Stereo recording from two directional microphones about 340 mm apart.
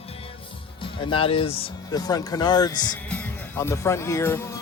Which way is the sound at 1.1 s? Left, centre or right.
Centre.